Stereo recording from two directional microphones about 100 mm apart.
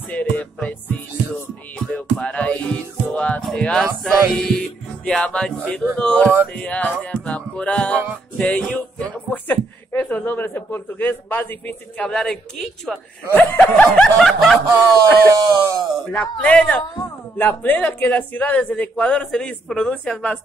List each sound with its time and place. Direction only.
0.1 s music: 15° left (ahead or behind)
5.9 s speech: 10° left (ahead or behind)
13.3 s speech: 15° left (ahead or behind)
14.2 s speech: 5° left (ahead or behind)
15.3 s speech: 40° right (ahead or behind)
16.1 s speech: 10° left (ahead or behind)